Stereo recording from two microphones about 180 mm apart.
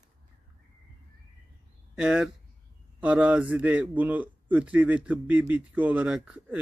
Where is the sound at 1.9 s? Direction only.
5° right (ahead or behind).